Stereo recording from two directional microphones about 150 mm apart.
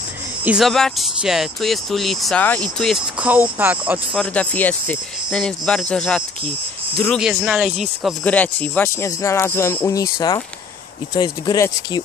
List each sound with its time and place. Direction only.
0.4 s speech: 10° right (ahead or behind)
0.7 s speech: centre (ahead or behind)
3.2 s speech: 10° right (ahead or behind)
4.1 s speech: 10° left (ahead or behind)
8.3 s speech: 10° left (ahead or behind)